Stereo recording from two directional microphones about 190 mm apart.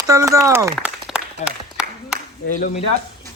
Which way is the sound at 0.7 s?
5° right (ahead or behind).